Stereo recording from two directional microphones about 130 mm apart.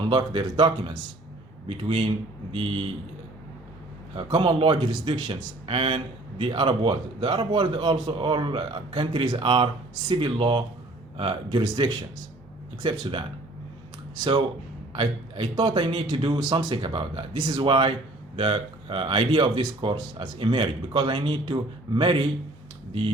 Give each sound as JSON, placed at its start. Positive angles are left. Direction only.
{"t": 0.1, "sound": "speech", "side_deg": -40}
{"t": 4.1, "sound": "speech", "side_deg": -40}
{"t": 14.9, "sound": "speech", "side_deg": -40}